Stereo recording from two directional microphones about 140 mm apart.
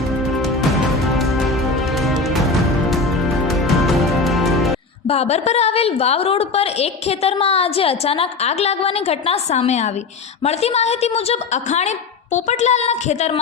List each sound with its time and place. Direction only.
0.3 s music: centre (ahead or behind)
5.0 s a woman's voice: 45° left (ahead or behind)